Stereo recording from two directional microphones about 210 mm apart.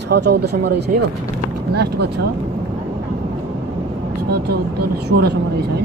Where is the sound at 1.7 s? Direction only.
50° right (ahead or behind).